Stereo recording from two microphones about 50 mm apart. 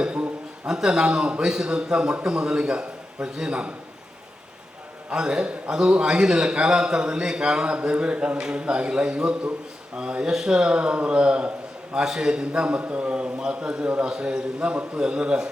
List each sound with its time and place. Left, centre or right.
0.0 s a sound: right
0.7 s a man's voice: centre
5.1 s a man's voice: centre